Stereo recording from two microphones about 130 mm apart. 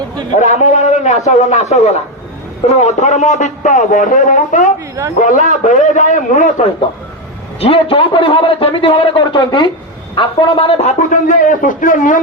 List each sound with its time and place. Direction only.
0.3 s a man's voice: 65° left (ahead or behind)
7.6 s a man's voice: 45° left (ahead or behind); by 12.2 s 90° left